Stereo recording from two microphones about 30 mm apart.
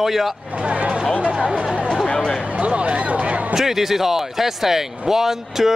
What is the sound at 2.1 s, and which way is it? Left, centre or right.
Speech, left.